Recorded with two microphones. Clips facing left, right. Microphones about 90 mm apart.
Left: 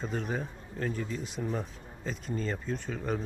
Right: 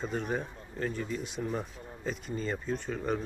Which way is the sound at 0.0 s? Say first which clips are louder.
Right 1 dB; centre (ahead or behind).